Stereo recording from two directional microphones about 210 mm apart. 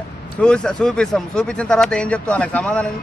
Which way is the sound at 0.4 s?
5° left (ahead or behind).